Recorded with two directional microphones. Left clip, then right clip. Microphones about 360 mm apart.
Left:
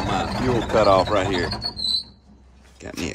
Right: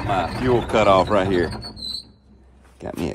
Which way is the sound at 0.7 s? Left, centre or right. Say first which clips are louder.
Even; right.